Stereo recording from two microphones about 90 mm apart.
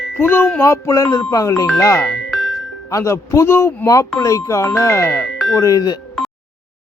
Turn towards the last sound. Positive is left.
turn(degrees=45)  # may be behind; listen again after turning